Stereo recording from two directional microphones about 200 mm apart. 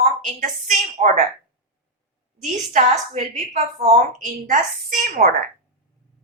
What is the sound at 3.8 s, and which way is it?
A woman's voice, 35° right (ahead or behind).